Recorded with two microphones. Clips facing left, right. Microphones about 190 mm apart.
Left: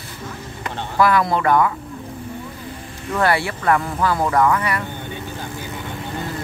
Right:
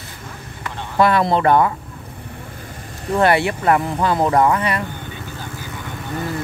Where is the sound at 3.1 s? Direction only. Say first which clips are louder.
Right 4 dB; 20° right (ahead or behind).